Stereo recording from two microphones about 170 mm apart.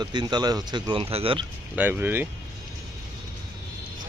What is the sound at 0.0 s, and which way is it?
Speech, 25° right (ahead or behind).